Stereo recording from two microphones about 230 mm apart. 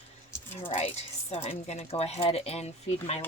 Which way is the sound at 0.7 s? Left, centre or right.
Left.